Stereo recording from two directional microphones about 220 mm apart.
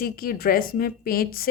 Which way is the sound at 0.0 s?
40° left (ahead or behind).